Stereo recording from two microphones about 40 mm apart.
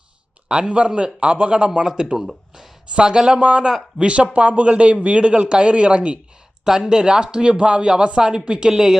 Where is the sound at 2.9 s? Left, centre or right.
Right.